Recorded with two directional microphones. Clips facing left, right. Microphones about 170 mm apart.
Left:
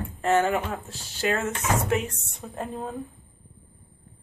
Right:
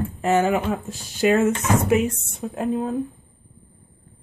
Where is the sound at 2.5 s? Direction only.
Centre (ahead or behind).